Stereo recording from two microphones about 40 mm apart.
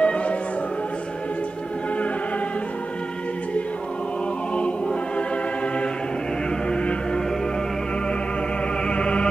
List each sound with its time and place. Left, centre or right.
0.0 s music: left
6.7 s music: left
8.8 s music: left